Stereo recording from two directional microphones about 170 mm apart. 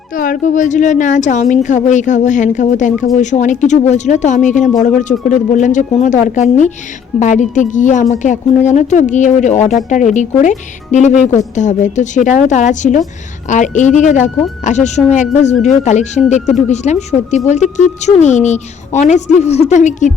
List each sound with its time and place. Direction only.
0.1 s a woman's voice: 55° left (ahead or behind)